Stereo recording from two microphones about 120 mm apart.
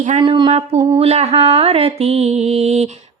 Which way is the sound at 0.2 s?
45° right (ahead or behind).